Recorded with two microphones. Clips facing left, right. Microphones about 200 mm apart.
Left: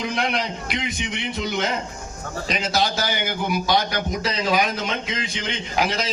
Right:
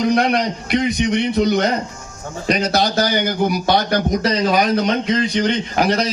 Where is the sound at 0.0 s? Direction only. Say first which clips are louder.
Right 8 dB; 40° right (ahead or behind).